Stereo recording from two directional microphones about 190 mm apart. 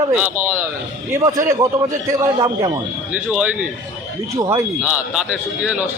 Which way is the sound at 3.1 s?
5° right (ahead or behind).